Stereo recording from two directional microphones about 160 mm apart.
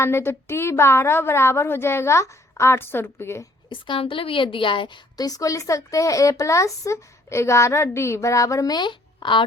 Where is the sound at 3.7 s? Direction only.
30° left (ahead or behind).